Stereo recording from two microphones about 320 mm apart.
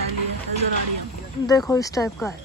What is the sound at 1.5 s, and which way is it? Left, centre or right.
Speech, centre.